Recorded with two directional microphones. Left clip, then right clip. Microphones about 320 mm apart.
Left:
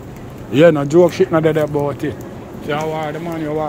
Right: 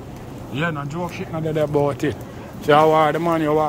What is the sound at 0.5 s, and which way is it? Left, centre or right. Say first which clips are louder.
Speech: left 14 dB; centre.